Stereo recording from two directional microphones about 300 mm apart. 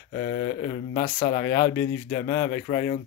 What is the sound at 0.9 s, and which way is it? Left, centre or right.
Speech, centre.